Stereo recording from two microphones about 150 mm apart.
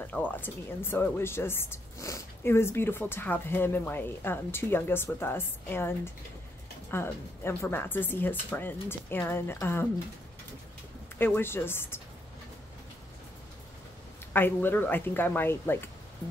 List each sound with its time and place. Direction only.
0.0 s speech: 10° left (ahead or behind)
11.1 s speech: 15° left (ahead or behind)
14.3 s speech: 15° left (ahead or behind)